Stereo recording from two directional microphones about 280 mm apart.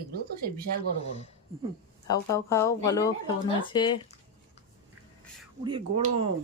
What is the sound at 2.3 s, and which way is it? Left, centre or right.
Speech, centre.